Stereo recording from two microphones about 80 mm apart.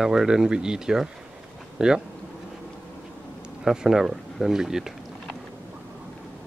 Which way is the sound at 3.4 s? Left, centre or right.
Centre.